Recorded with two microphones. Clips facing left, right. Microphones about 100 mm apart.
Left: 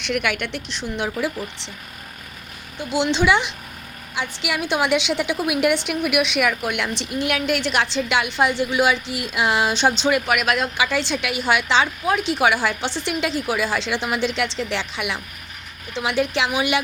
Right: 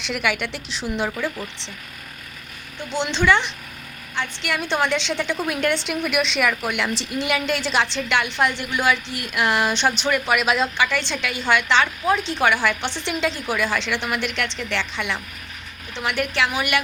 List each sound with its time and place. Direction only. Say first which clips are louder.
0.0 s a woman's voice: left 1 dB; centre (ahead or behind)
2.7 s a woman's voice: left 4 dB; 10° left (ahead or behind)
7.9 s a woman's voice: left 2 dB; 15° left (ahead or behind)
10.2 s a woman's voice: right 1 dB; centre (ahead or behind)